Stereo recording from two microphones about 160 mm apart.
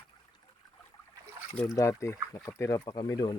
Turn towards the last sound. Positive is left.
turn(degrees=25)  # may be behind; listen again after turning